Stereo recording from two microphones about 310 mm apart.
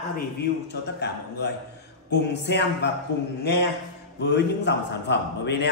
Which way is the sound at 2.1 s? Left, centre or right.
Left.